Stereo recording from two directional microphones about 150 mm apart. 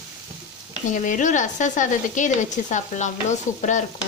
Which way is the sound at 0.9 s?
55° left (ahead or behind).